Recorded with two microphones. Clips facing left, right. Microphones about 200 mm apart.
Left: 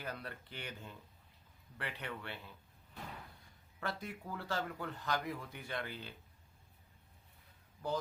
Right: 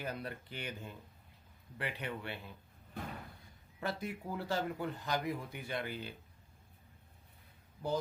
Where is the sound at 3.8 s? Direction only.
15° right (ahead or behind).